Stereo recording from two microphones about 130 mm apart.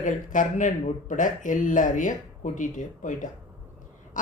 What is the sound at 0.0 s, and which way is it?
Speech, 80° left.